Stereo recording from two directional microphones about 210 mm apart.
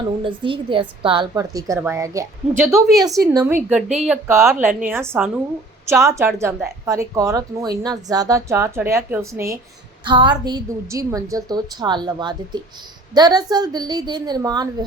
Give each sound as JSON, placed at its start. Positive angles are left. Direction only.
{"t": 0.2, "sound": "a woman's voice", "side_deg": -25}